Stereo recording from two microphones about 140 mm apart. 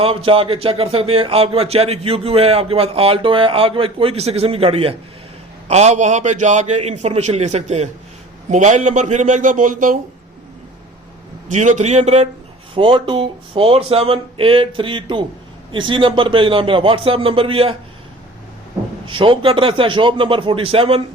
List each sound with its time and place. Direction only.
0.0 s a man's voice: 40° right (ahead or behind); by 10.0 s 70° right (ahead or behind)
11.4 s a man's voice: 60° right (ahead or behind)
12.7 s speech: 40° right (ahead or behind)
19.0 s speech: 35° right (ahead or behind)